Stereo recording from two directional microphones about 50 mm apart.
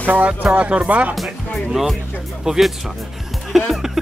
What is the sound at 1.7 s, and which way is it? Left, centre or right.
Speech, centre.